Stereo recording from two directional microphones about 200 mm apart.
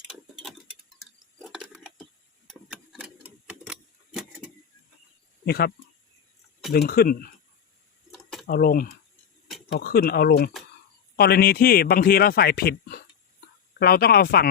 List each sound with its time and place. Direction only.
0.1 s clock: centre (ahead or behind)
5.5 s a man's voice: 50° left (ahead or behind)
6.7 s a man's voice: 50° left (ahead or behind)
8.1 s a sound: centre (ahead or behind)
8.4 s a man's voice: 45° left (ahead or behind)